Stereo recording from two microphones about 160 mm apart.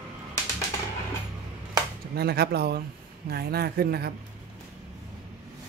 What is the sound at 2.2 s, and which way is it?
Speech, 85° right.